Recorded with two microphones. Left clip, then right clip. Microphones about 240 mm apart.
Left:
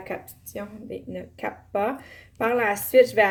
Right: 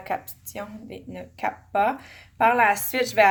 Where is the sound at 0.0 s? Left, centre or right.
Right.